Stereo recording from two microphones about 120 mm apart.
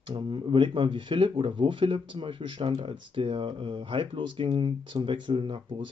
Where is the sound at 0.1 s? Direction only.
45° right (ahead or behind).